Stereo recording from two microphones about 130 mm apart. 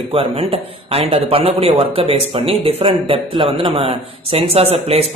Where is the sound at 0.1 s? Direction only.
45° right (ahead or behind).